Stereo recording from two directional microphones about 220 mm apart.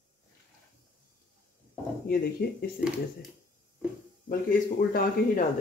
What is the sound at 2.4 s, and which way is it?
Speech, 45° left (ahead or behind).